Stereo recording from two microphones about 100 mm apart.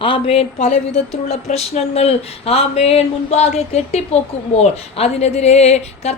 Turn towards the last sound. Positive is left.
turn(degrees=90)